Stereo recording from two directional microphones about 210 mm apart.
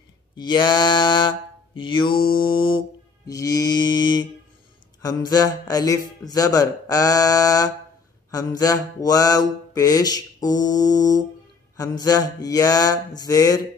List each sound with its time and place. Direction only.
0.4 s mantra: 20° left (ahead or behind)
2.4 s music: 25° left (ahead or behind)
3.3 s mantra: 15° left (ahead or behind)